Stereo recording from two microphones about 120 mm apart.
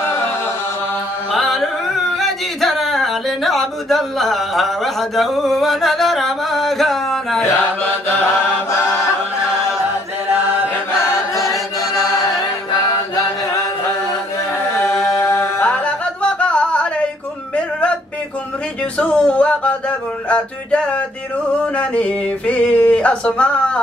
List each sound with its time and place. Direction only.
1.3 s music: centre (ahead or behind)
2.1 s yodeling: centre (ahead or behind)
10.3 s chant: 15° right (ahead or behind)
14.8 s music: 20° left (ahead or behind)
15.6 s music: 10° left (ahead or behind)
17.6 s a sound: 10° left (ahead or behind)
18.9 s music: 10° left (ahead or behind)
21.7 s a sound: 10° left (ahead or behind)